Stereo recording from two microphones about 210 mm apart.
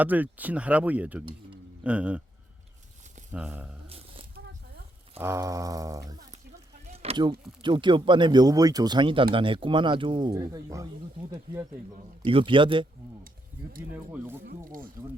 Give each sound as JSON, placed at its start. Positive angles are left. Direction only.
{"t": 0.0, "sound": "speech", "side_deg": -10}
{"t": 3.3, "sound": "speech", "side_deg": -5}
{"t": 3.8, "sound": "a sound", "side_deg": -25}
{"t": 5.2, "sound": "speech", "side_deg": -15}
{"t": 6.9, "sound": "speech", "side_deg": -30}
{"t": 12.2, "sound": "speech", "side_deg": -25}
{"t": 13.9, "sound": "speech", "side_deg": -10}
{"t": 14.4, "sound": "speech", "side_deg": -40}